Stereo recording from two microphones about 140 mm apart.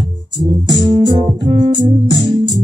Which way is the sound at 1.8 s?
30° right (ahead or behind).